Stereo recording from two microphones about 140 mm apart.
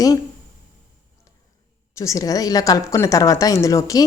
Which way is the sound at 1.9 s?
20° left (ahead or behind).